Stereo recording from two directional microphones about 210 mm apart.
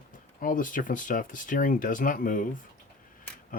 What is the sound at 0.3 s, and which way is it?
Speech, 40° left (ahead or behind).